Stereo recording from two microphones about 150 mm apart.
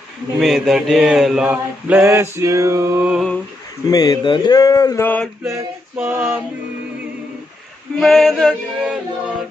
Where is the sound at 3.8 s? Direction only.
25° left (ahead or behind).